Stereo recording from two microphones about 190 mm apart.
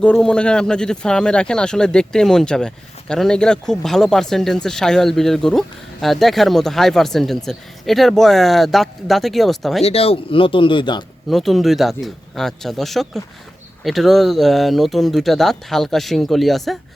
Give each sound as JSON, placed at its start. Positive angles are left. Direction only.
{"t": 0.0, "sound": "speech", "side_deg": 5}
{"t": 9.8, "sound": "speech", "side_deg": 30}
{"t": 11.3, "sound": "speech", "side_deg": 0}